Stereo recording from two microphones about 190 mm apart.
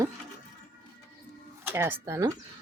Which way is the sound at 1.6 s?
10° right (ahead or behind).